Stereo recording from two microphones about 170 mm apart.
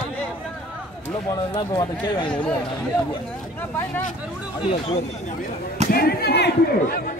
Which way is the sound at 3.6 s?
10° left (ahead or behind).